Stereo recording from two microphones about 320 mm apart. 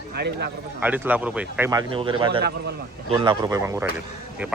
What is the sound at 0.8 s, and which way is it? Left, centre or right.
Speech, centre.